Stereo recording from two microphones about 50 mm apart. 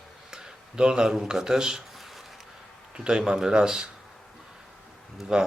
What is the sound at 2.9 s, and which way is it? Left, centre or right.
Speech, centre.